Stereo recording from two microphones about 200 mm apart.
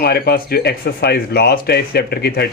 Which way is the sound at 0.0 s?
50° left (ahead or behind).